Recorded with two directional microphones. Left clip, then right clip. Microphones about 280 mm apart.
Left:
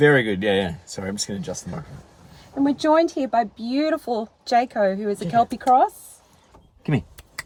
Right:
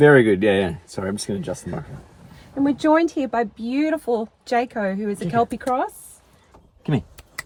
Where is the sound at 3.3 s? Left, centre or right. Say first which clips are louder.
Left 2 dB; centre.